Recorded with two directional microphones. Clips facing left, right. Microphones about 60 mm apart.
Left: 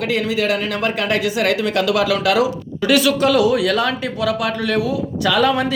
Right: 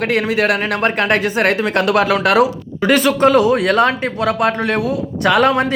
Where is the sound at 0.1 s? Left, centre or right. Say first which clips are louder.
Right 2 dB; right.